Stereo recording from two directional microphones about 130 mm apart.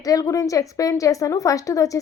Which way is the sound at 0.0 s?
25° left (ahead or behind).